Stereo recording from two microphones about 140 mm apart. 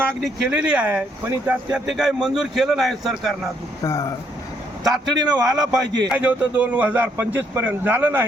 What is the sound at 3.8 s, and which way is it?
Speech, 20° left (ahead or behind).